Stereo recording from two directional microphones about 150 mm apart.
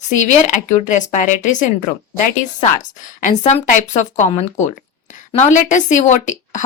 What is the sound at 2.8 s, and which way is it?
Speech, 55° left (ahead or behind).